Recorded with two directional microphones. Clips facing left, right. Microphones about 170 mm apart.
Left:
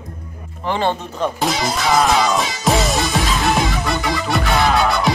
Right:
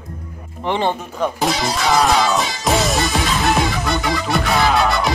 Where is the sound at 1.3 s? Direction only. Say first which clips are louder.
Even; centre (ahead or behind).